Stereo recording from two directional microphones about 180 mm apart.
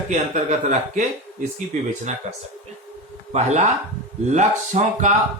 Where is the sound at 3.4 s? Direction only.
40° right (ahead or behind).